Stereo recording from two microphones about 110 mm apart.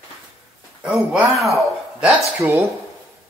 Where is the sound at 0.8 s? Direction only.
10° right (ahead or behind).